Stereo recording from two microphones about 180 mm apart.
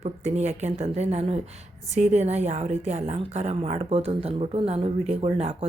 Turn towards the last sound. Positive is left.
turn(degrees=-35)  # may be behind; listen again after turning